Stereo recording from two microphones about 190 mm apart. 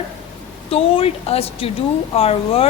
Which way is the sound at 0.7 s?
30° left (ahead or behind).